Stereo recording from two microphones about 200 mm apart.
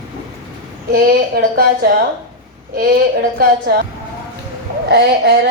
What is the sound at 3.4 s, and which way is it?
Speech, 50° right (ahead or behind).